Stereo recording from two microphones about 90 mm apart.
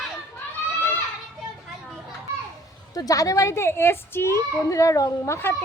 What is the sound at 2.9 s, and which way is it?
A woman's voice, 40° left (ahead or behind).